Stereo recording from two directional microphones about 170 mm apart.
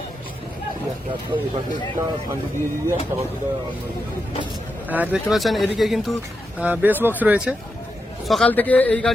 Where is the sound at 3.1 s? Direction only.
15° right (ahead or behind).